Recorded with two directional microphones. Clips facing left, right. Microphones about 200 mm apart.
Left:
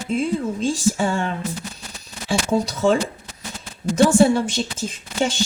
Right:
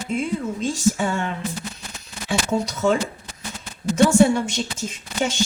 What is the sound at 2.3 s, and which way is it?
Speech, 30° left (ahead or behind).